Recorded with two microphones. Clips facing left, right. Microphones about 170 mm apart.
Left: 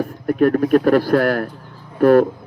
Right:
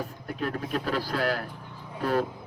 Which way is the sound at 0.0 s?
60° left (ahead or behind).